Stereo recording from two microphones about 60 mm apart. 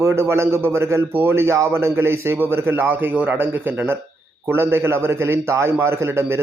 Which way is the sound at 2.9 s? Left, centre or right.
Right.